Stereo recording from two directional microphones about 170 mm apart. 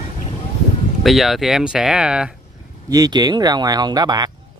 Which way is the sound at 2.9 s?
25° right (ahead or behind).